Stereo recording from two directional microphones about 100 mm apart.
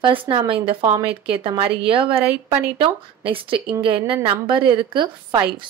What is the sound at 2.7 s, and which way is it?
A woman's voice, 65° right (ahead or behind).